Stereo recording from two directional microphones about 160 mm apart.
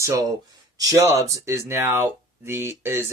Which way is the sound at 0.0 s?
20° right (ahead or behind).